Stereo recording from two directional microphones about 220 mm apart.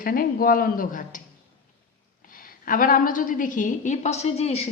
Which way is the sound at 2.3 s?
40° left (ahead or behind).